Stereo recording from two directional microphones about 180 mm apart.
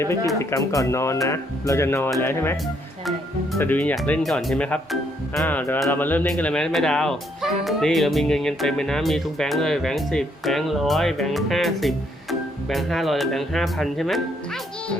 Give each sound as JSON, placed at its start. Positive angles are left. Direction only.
{"t": 0.3, "sound": "speech", "side_deg": 20}
{"t": 3.6, "sound": "speech", "side_deg": 10}